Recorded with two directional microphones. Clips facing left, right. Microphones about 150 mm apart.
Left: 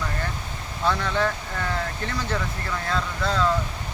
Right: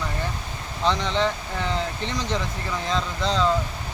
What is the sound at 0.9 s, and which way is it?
Speech, 20° right (ahead or behind).